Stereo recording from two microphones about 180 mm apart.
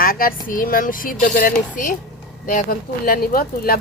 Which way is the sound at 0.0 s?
55° left (ahead or behind).